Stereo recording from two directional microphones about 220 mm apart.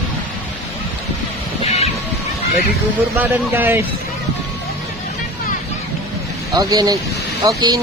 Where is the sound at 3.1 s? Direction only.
10° right (ahead or behind).